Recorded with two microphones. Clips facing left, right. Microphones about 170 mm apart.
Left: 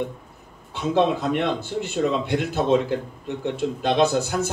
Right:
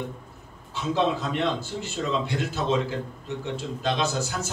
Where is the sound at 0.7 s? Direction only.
60° left (ahead or behind).